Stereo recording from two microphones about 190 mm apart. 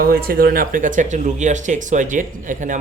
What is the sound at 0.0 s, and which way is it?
Speech, 50° right (ahead or behind).